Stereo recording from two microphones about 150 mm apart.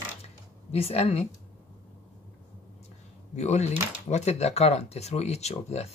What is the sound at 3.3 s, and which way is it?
Speech, 50° left (ahead or behind).